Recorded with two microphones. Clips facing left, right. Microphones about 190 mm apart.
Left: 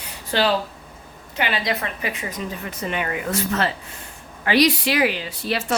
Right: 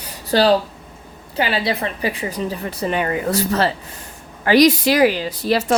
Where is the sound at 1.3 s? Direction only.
30° right (ahead or behind).